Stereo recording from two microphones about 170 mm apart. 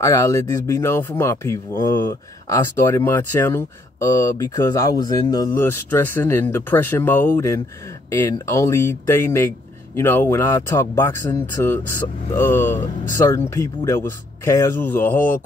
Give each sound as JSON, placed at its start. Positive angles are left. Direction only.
{"t": 0.0, "sound": "speech", "side_deg": 20}